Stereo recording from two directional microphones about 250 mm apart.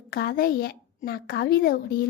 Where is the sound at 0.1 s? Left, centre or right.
Left.